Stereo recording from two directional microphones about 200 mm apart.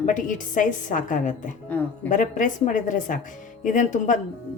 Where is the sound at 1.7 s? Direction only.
10° left (ahead or behind).